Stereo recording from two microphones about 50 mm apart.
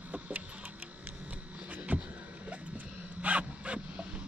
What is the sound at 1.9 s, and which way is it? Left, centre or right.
Vehicle, right.